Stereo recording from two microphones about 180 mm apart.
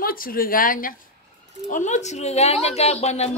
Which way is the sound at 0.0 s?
55° left (ahead or behind).